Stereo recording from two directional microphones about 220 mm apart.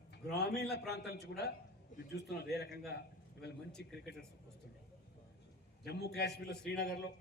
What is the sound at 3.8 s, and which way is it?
Speech, 45° left (ahead or behind).